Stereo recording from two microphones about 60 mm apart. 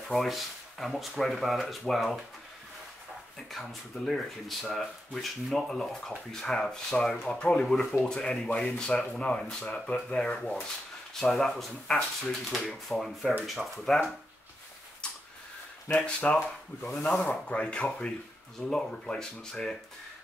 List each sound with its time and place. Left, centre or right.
0.1 s speech: centre
3.5 s speech: centre
15.9 s speech: left
16.2 s speech: centre